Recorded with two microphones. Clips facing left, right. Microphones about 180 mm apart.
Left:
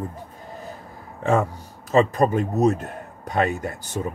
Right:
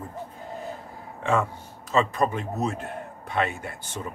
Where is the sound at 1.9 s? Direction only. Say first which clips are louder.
Left 5 dB; 40° left (ahead or behind).